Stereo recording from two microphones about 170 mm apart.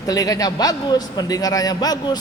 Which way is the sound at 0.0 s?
20° left (ahead or behind).